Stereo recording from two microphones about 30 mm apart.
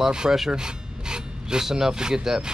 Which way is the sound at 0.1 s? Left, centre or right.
Right.